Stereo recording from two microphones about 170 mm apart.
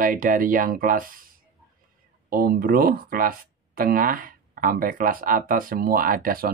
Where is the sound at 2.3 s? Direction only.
60° right (ahead or behind).